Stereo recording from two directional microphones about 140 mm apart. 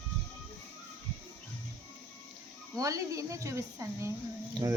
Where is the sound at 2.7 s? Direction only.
25° right (ahead or behind).